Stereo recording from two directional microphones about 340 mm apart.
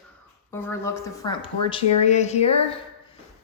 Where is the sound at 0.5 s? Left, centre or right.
Centre.